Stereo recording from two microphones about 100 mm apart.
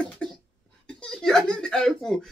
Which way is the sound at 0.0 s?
10° left (ahead or behind).